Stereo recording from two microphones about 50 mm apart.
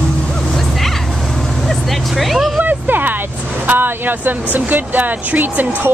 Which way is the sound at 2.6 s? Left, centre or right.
Right.